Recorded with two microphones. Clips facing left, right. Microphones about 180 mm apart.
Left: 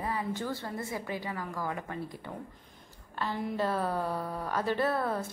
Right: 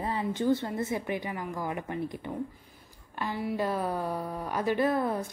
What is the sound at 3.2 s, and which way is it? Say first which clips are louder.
A woman's voice: right 1 dB; 10° right (ahead or behind).